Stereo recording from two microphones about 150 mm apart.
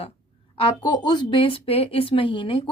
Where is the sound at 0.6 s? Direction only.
30° left (ahead or behind).